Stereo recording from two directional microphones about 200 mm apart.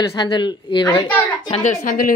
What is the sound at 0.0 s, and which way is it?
Speech, 25° left (ahead or behind).